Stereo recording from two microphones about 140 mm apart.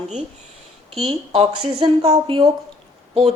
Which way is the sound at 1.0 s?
45° right (ahead or behind).